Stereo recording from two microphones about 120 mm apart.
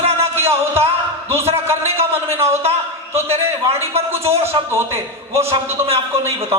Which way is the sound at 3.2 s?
60° right (ahead or behind).